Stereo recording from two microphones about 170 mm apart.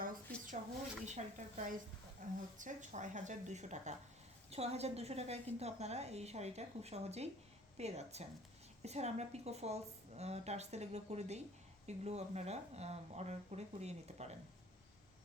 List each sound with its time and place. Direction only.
1.0 s a woman's voice: 45° right (ahead or behind)